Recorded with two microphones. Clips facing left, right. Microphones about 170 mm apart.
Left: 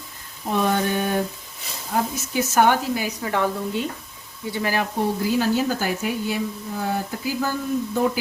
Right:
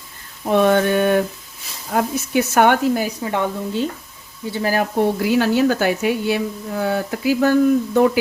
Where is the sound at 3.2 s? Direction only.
25° right (ahead or behind).